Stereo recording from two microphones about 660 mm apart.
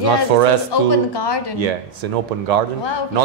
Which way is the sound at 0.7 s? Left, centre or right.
Left.